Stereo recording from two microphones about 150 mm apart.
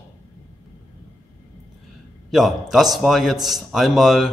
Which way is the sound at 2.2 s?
Centre (ahead or behind).